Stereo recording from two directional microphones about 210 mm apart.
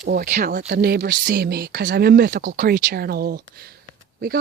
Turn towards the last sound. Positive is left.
turn(degrees=-45)  # may be behind; listen again after turning